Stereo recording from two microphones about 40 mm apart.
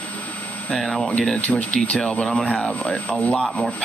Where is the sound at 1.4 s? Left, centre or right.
Left.